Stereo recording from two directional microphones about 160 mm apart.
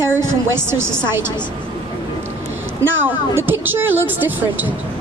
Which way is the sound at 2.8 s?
15° right (ahead or behind).